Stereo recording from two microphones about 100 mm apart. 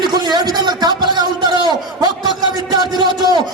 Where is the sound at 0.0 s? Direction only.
45° right (ahead or behind).